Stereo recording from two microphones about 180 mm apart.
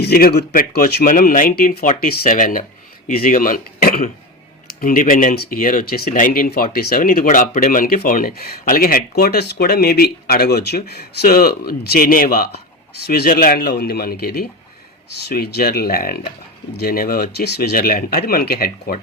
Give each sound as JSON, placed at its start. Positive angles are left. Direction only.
{"t": 0.0, "sound": "speech", "side_deg": 60}